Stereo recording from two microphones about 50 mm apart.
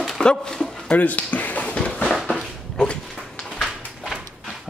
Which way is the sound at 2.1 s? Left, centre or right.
Centre.